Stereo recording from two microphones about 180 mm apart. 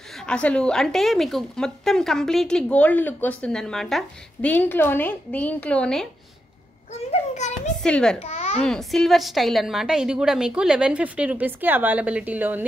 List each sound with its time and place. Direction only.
0.2 s a woman's voice: 5° left (ahead or behind)
6.9 s a sound: 40° left (ahead or behind)
7.8 s a woman's voice: 5° left (ahead or behind)
8.2 s babbling: 40° left (ahead or behind)
8.5 s a woman's voice: 5° left (ahead or behind)